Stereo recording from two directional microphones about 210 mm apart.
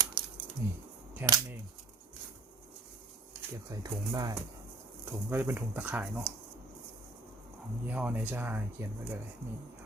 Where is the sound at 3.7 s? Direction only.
15° right (ahead or behind).